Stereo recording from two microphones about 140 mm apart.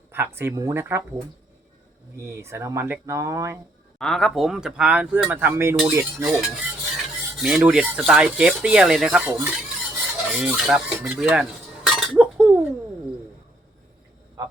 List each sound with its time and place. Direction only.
0.1 s speech: 15° right (ahead or behind)
2.2 s speech: 20° right (ahead or behind)
3.9 s speech: 5° left (ahead or behind); by 6.2 s 15° right (ahead or behind)
6.2 s stir: centre (ahead or behind)
9.3 s speech: 15° right (ahead or behind)
10.3 s cutlery: 5° right (ahead or behind)